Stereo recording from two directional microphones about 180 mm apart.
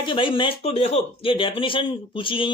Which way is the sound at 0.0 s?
30° left (ahead or behind).